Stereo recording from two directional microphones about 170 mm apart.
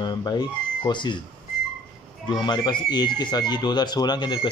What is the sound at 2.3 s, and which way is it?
Speech, 25° left (ahead or behind).